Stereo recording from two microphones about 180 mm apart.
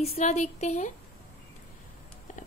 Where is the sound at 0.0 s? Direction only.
35° left (ahead or behind).